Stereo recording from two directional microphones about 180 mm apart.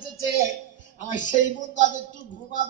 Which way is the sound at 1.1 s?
45° left (ahead or behind).